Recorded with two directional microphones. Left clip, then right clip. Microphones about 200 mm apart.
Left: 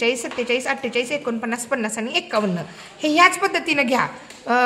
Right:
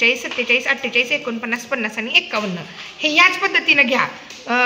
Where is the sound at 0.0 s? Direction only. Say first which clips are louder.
Right 4 dB; 45° left (ahead or behind).